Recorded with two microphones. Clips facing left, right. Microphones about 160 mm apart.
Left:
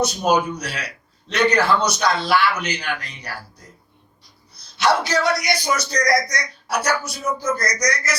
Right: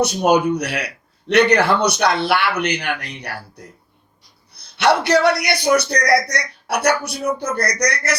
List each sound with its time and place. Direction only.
0.0 s a man's voice: 65° right (ahead or behind)
4.5 s a man's voice: 65° right (ahead or behind)